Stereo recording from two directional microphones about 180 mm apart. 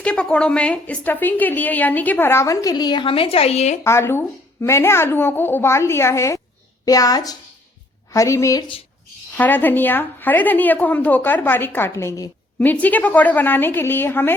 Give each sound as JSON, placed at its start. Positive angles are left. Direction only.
{"t": 0.0, "sound": "a woman's voice", "side_deg": 5}
{"t": 3.8, "sound": "a woman's voice", "side_deg": 15}
{"t": 9.4, "sound": "a woman's voice", "side_deg": 10}